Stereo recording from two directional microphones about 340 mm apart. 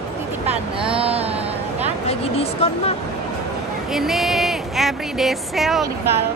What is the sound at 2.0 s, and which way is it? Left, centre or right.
Speech, centre.